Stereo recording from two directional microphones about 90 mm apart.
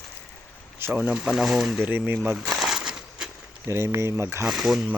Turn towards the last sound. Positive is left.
turn(degrees=-5)  # may be behind; listen again after turning